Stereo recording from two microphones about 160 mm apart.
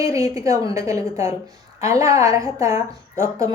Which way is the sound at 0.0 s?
20° right (ahead or behind).